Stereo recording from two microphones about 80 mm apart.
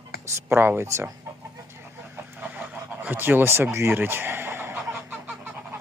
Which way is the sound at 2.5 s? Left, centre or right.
Right.